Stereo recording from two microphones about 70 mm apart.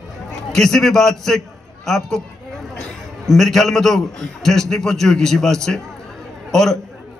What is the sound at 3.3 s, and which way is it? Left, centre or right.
A man's voice, centre.